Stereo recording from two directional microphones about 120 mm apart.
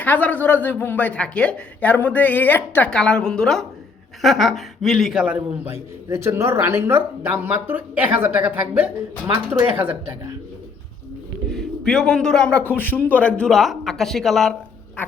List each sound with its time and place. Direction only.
0.0 s a man's voice: 15° left (ahead or behind); by 5.7 s 10° right (ahead or behind)
5.7 s speech: 20° right (ahead or behind)
11.5 s a man's voice: 5° left (ahead or behind)